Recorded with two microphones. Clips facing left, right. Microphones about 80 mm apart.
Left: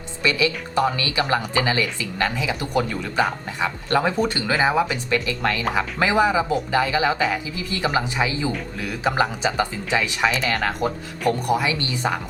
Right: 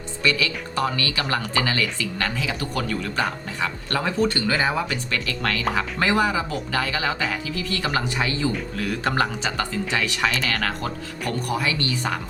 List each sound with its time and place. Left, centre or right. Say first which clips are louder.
0.2 s speech: left 2 dB; centre
10.2 s speech: left 3 dB; centre
10.5 s speech: left 3 dB; centre